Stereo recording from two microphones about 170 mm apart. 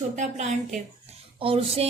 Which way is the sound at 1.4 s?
35° right (ahead or behind).